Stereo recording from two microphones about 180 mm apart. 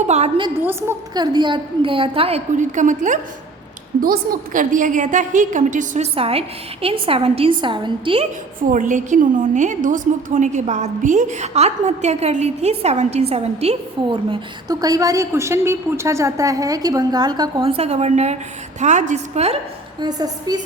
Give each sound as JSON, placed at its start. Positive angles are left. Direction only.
{"t": 0.1, "sound": "a woman's voice", "side_deg": -35}
{"t": 0.6, "sound": "a woman's voice", "side_deg": -15}
{"t": 8.7, "sound": "a woman's voice", "side_deg": -45}
{"t": 20.0, "sound": "a woman's voice", "side_deg": -20}